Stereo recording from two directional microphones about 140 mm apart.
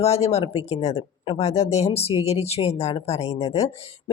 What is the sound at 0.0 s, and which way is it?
Speech, 50° left (ahead or behind).